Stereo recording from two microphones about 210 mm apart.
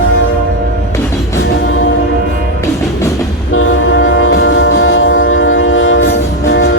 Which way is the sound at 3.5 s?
75° left (ahead or behind).